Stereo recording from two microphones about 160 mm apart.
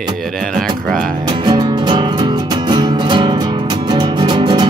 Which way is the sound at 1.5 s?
30° right (ahead or behind).